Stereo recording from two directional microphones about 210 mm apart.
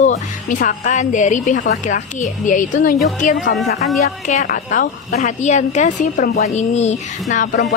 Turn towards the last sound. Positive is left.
turn(degrees=35)  # may be behind; listen again after turning